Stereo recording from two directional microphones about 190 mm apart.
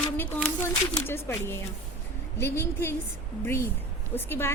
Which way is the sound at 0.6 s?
15° left (ahead or behind).